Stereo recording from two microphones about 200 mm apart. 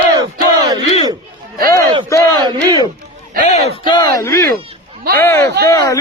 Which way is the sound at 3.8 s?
25° left (ahead or behind).